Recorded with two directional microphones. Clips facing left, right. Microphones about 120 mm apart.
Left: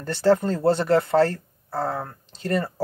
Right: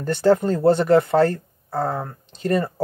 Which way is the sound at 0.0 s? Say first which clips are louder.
Right 2 dB; 15° right (ahead or behind).